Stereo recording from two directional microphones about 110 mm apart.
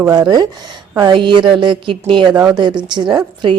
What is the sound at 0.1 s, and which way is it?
A woman's voice, 40° right (ahead or behind).